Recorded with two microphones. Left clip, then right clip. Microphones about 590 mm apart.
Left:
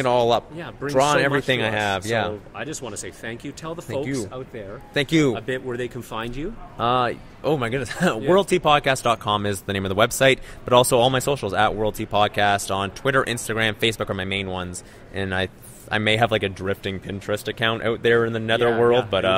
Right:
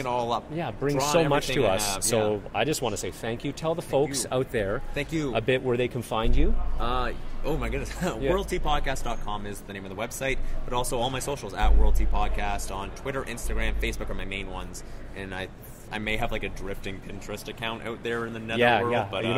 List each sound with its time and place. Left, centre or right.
0.0 s speech: left
2.5 s speech: centre
4.3 s speech: right
4.9 s speech: left
5.3 s speech: centre
6.8 s speech: left